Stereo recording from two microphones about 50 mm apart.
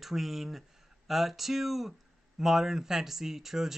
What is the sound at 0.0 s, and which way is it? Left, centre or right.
Speech, centre.